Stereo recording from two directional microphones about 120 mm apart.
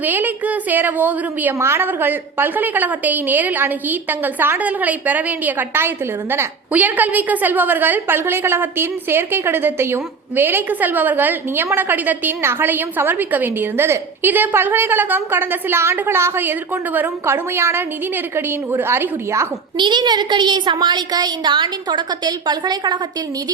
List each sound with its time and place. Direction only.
0.0 s a woman's voice: 15° right (ahead or behind)
19.7 s a woman's voice: 40° right (ahead or behind)